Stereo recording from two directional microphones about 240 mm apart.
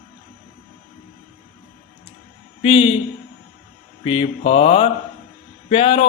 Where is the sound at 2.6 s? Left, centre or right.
Left.